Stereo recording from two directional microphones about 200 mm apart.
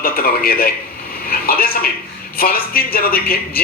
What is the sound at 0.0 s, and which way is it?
A man's voice, 50° left (ahead or behind).